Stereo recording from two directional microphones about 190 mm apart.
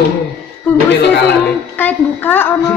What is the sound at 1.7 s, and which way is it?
Speech, 10° left (ahead or behind).